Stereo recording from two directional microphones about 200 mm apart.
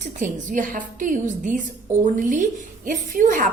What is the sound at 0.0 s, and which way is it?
A woman's voice, 40° right (ahead or behind).